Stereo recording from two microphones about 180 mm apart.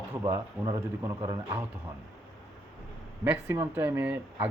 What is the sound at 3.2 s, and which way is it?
Speech, 10° right (ahead or behind).